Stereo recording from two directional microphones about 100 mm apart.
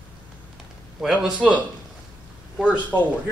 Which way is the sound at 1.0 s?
5° right (ahead or behind).